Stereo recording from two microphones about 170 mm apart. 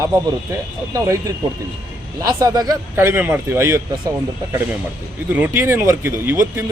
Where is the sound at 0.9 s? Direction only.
20° right (ahead or behind).